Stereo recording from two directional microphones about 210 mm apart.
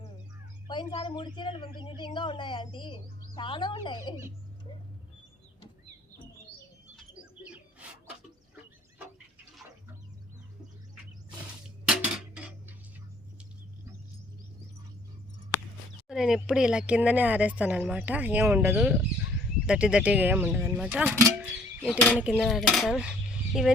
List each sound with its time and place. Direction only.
0.7 s a woman's voice: 20° left (ahead or behind)
12.3 s dishes: 5° right (ahead or behind)
16.0 s speech: centre (ahead or behind)
22.2 s dishes: 5° right (ahead or behind)